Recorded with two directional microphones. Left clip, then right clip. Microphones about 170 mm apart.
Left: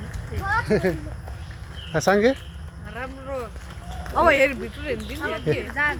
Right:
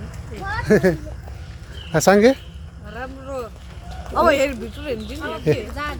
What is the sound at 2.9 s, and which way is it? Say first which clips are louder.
Speech: right 1 dB; 25° right (ahead or behind).